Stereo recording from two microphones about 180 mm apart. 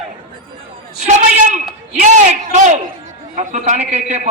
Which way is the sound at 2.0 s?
40° right (ahead or behind).